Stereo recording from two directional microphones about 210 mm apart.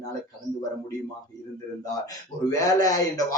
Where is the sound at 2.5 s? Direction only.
15° left (ahead or behind).